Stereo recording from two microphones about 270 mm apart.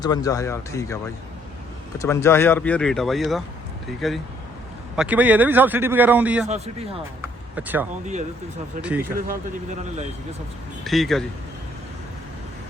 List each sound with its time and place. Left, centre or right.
0.0 s speech: centre
2.0 s a man's voice: centre
6.5 s a man's voice: right
7.5 s speech: centre
9.1 s speech: right
10.8 s a man's voice: centre